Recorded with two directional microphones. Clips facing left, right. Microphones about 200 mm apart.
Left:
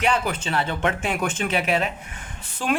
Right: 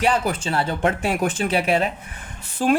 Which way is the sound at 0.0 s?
35° right (ahead or behind).